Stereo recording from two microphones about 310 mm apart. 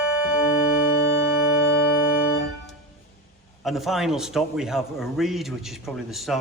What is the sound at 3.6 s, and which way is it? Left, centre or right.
A man's voice, centre.